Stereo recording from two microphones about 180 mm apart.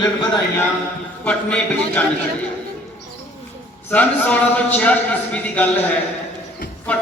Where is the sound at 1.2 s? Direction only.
5° left (ahead or behind).